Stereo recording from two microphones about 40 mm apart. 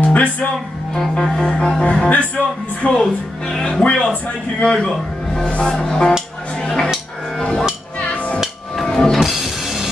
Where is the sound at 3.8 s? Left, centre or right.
Left.